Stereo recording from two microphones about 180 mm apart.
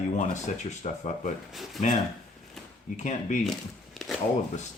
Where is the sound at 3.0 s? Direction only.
40° left (ahead or behind).